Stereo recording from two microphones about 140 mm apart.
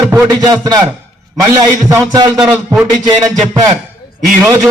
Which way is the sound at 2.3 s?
Centre (ahead or behind).